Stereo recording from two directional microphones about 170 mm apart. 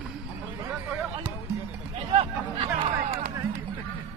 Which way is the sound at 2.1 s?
35° right (ahead or behind).